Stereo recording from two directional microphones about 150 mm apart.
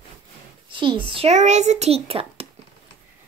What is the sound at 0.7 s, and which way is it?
A child's voice, 35° right (ahead or behind).